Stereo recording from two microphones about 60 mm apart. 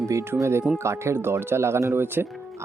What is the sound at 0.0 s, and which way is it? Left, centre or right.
Speech, right.